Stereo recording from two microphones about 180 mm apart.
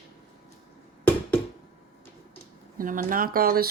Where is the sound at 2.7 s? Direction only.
50° right (ahead or behind).